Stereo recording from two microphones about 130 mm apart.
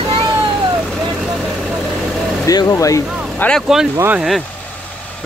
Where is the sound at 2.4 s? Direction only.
25° left (ahead or behind).